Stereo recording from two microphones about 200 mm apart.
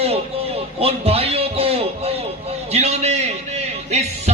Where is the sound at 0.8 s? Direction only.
30° right (ahead or behind).